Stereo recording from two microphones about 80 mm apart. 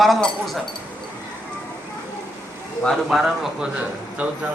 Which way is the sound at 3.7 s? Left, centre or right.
Centre.